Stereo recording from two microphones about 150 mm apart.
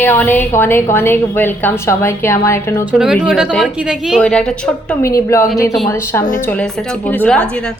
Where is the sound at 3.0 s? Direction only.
5° right (ahead or behind).